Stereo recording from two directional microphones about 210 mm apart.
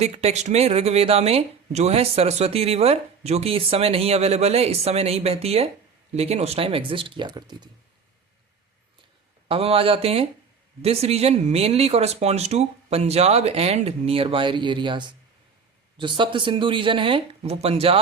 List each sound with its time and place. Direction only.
0.0 s speech: 30° right (ahead or behind)
9.5 s speech: 25° right (ahead or behind)